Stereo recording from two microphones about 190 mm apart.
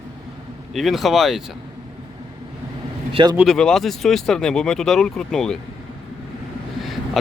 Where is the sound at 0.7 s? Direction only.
Centre (ahead or behind).